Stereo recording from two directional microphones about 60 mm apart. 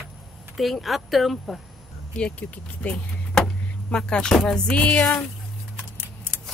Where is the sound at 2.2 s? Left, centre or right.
Centre.